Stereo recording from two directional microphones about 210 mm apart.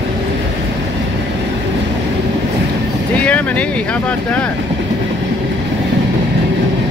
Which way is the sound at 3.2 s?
5° left (ahead or behind).